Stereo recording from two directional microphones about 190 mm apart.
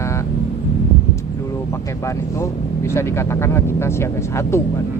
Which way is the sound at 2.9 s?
15° left (ahead or behind).